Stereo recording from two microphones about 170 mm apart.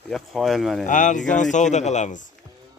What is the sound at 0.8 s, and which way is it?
Speech, 50° left (ahead or behind).